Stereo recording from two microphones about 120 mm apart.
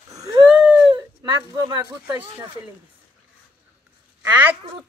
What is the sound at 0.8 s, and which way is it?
Speech, 35° right (ahead or behind).